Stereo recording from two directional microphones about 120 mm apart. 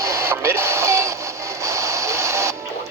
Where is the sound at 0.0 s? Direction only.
25° right (ahead or behind).